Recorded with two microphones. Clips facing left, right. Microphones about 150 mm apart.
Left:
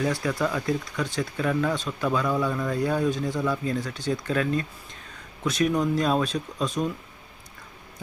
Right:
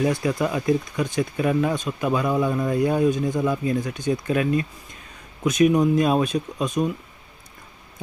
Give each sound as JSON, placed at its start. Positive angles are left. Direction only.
{"t": 0.0, "sound": "speech", "side_deg": -20}